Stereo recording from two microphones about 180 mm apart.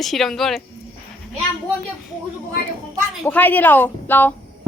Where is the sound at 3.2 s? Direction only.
10° left (ahead or behind).